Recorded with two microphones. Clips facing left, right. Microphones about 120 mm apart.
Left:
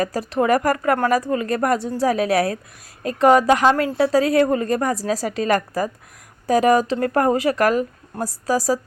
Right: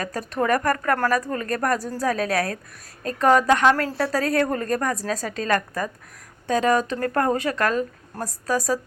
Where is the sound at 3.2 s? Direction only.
15° left (ahead or behind).